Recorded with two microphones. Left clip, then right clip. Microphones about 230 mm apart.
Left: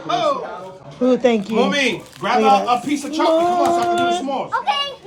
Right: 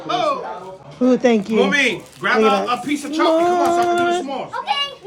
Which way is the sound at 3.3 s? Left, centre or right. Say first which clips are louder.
Even; right.